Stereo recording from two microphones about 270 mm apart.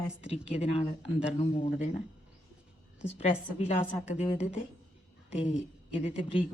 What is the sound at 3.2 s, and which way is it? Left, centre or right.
A woman's voice, left.